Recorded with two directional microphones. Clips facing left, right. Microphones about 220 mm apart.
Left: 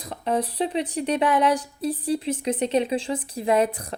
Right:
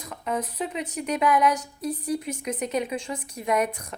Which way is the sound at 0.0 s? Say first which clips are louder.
Left 4 dB; 35° left (ahead or behind).